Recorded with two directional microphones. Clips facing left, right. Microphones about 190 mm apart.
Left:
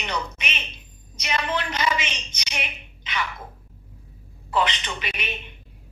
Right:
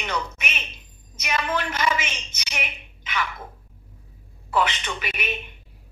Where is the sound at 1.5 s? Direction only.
5° right (ahead or behind).